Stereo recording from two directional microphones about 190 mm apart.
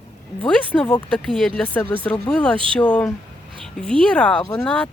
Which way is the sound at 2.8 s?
5° left (ahead or behind).